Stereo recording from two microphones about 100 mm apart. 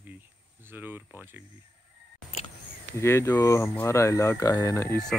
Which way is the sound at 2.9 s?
25° left (ahead or behind).